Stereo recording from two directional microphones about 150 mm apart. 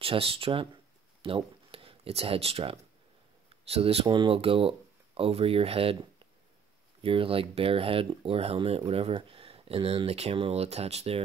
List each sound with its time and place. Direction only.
0.0 s speech: 40° right (ahead or behind)